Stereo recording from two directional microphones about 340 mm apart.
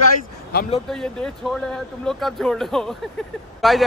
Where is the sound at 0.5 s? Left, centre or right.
Left.